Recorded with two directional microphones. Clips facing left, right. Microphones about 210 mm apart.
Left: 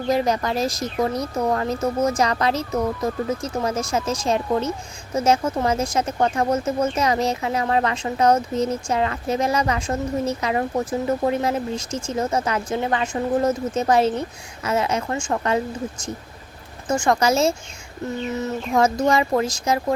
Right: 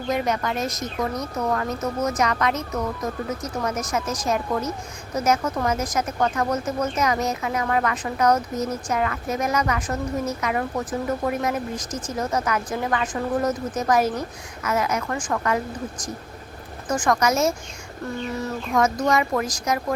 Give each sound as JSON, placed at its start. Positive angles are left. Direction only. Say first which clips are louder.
{"t": 0.1, "sound": "speech", "louder": "left 3 dB", "side_deg": 35}